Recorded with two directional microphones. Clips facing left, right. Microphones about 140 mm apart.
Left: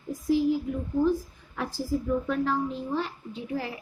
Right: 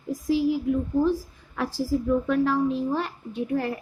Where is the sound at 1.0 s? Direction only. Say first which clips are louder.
Right 1 dB; 90° right.